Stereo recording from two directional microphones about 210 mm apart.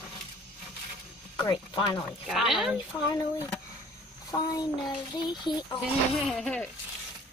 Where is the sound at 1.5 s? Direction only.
20° left (ahead or behind).